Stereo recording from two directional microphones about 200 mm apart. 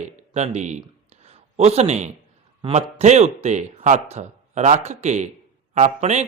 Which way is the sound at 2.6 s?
30° right (ahead or behind).